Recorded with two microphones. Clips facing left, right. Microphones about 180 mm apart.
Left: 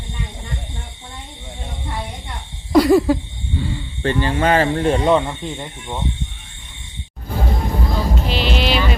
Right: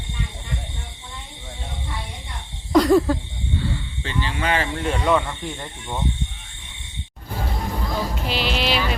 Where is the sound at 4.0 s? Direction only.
50° left (ahead or behind); by 5.9 s 15° left (ahead or behind).